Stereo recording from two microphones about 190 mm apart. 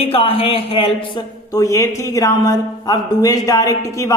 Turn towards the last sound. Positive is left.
turn(degrees=15)  # may be behind; listen again after turning